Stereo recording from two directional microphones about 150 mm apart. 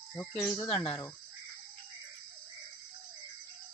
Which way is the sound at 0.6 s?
30° left (ahead or behind).